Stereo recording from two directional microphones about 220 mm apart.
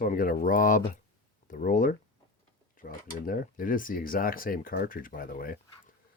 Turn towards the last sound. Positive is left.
turn(degrees=40)  # may be behind; listen again after turning